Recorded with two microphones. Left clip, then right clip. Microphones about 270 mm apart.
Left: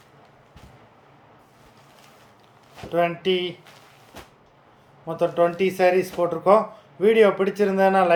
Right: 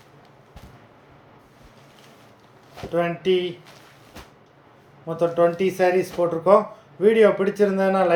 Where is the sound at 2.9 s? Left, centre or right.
Centre.